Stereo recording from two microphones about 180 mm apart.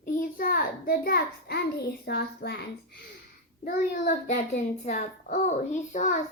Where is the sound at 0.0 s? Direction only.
50° left (ahead or behind).